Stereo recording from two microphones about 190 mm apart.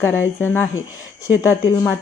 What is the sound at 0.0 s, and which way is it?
Speech, 10° left (ahead or behind).